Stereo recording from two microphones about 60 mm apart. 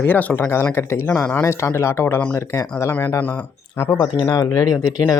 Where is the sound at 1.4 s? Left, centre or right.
Left.